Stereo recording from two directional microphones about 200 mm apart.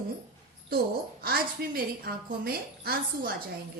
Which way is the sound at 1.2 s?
50° right (ahead or behind).